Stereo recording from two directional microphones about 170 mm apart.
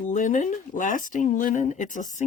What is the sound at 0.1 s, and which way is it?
Speech, 50° left (ahead or behind).